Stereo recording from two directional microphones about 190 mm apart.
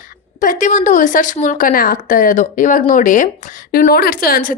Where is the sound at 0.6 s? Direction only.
40° left (ahead or behind).